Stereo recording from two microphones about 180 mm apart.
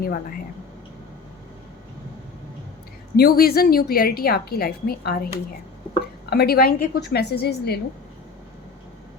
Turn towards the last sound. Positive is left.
turn(degrees=65)  # may be behind; listen again after turning